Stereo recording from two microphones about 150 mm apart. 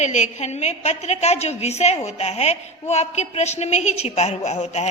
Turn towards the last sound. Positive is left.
turn(degrees=50)  # may be behind; listen again after turning